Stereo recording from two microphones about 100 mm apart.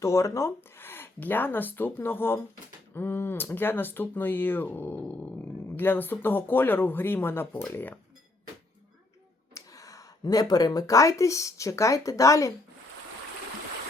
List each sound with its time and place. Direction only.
0.0 s speech: 30° left (ahead or behind)
9.6 s speech: 35° left (ahead or behind)